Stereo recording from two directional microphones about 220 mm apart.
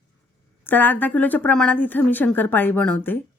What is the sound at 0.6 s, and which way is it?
Speech, 10° left (ahead or behind).